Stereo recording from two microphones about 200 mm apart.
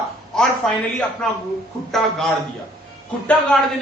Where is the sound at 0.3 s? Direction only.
5° left (ahead or behind).